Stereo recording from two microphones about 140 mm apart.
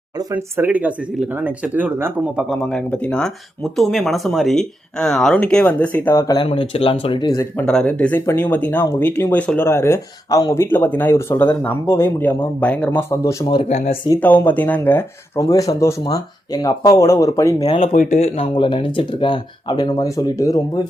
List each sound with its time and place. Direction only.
0.2 s speech: 20° right (ahead or behind); by 6.2 s 15° left (ahead or behind)
6.2 s speech: 35° left (ahead or behind)
7.5 s speech: 5° left (ahead or behind)
13.4 s speech: 30° left (ahead or behind)
13.7 s speech: 50° left (ahead or behind)
14.2 s speech: 10° left (ahead or behind)
17.9 s speech: 75° left (ahead or behind)
18.2 s speech: 40° left (ahead or behind); by 20.8 s 25° left (ahead or behind)